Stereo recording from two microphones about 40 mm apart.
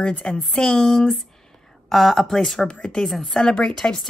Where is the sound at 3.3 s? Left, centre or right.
Centre.